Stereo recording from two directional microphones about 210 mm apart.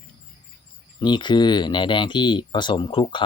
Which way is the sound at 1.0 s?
20° left (ahead or behind).